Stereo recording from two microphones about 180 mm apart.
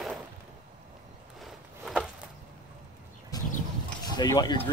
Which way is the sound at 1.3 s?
Centre (ahead or behind).